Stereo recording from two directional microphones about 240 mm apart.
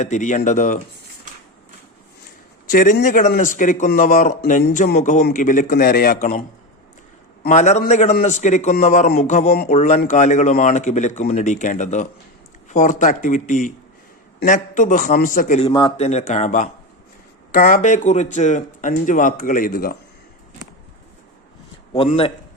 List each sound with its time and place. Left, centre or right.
0.0 s a man's voice: left
2.6 s a man's voice: left
7.4 s a man's voice: left
21.9 s a man's voice: left